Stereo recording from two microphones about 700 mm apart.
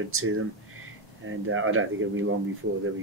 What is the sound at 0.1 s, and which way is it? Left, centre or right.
Speech, centre.